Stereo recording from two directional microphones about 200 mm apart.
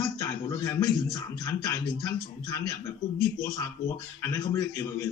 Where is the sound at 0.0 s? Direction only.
15° left (ahead or behind).